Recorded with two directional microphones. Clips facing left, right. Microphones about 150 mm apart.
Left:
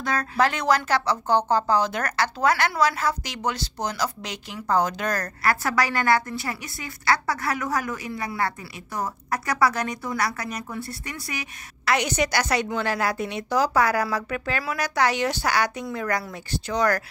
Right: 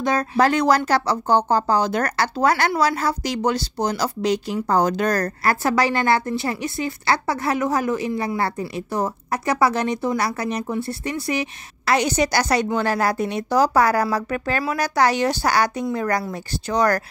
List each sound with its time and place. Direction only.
0.0 s a woman's voice: 20° right (ahead or behind)
0.4 s a woman's voice: 35° right (ahead or behind)